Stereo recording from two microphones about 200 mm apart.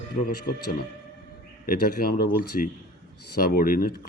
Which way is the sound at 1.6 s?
50° left (ahead or behind).